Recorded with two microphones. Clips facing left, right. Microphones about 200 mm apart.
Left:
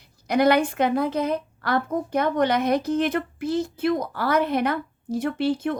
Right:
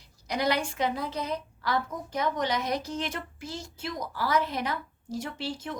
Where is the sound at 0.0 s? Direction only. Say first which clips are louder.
Left 9 dB; 55° left (ahead or behind).